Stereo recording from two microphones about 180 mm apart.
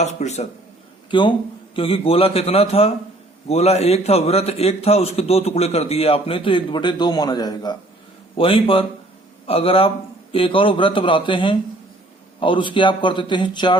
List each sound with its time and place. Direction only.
0.0 s a man's voice: 40° left (ahead or behind)
1.1 s a man's voice: 25° left (ahead or behind)